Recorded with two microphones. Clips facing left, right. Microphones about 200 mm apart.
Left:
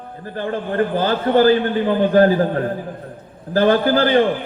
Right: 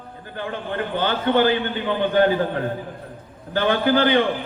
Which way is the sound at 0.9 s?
35° left (ahead or behind).